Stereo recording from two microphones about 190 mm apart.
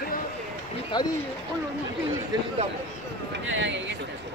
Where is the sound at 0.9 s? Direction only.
25° left (ahead or behind).